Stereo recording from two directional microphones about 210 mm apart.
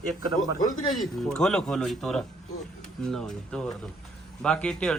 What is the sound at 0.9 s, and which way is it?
A man's voice, centre (ahead or behind).